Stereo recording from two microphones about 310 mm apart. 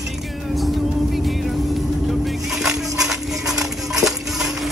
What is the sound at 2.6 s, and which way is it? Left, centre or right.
Music, centre.